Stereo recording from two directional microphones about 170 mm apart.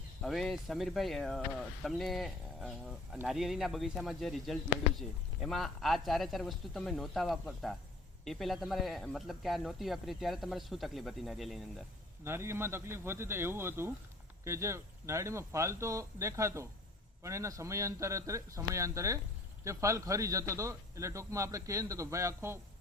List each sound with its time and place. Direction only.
0.2 s speech: centre (ahead or behind)
12.2 s a man's voice: 15° right (ahead or behind)